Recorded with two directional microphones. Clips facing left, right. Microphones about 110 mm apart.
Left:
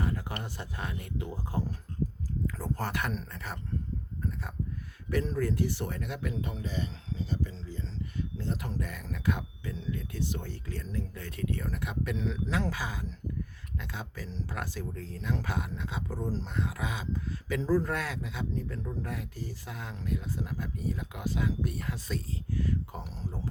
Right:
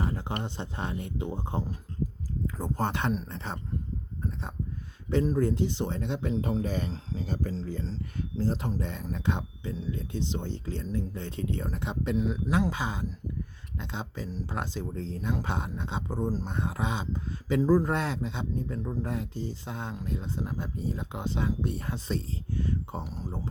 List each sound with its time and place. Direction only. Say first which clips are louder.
0.0 s speech: right 2 dB; 30° right (ahead or behind)
5.4 s speech: right 3 dB; 25° right (ahead or behind)
6.4 s speech: right 6 dB; 40° right (ahead or behind)
17.6 s speech: right 4 dB; 15° right (ahead or behind)
17.8 s speech: right 4 dB; 25° right (ahead or behind)